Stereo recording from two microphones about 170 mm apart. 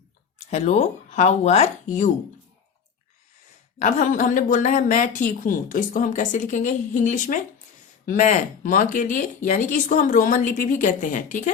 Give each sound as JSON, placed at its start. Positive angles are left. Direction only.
{"t": 0.5, "sound": "speech", "side_deg": 40}
{"t": 3.8, "sound": "speech", "side_deg": 45}